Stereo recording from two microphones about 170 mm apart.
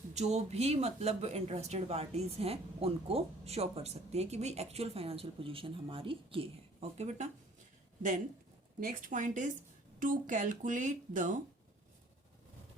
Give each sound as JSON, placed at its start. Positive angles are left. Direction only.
{"t": 0.1, "sound": "speech", "side_deg": -40}
{"t": 8.8, "sound": "speech", "side_deg": -50}